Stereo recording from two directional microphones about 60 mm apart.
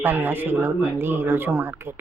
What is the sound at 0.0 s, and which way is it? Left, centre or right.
Speech, right.